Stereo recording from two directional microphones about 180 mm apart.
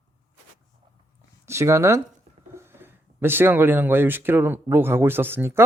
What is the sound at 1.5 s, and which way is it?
Speech, 15° right (ahead or behind).